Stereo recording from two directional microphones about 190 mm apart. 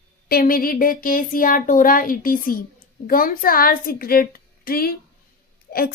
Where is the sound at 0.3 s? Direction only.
50° left (ahead or behind).